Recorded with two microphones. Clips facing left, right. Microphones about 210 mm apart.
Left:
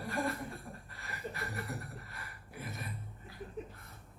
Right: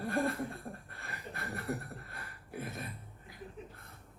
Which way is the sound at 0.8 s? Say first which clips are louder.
Left 3 dB; 55° right (ahead or behind).